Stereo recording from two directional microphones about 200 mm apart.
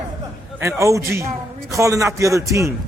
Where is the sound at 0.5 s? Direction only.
15° right (ahead or behind).